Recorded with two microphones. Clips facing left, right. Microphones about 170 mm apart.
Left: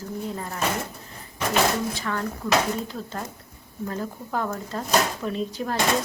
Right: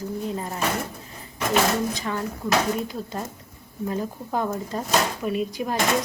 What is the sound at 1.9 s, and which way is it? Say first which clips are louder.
Speech: even; 15° right (ahead or behind).